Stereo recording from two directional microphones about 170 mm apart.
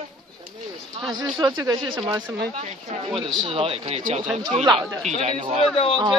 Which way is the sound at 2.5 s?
40° right (ahead or behind).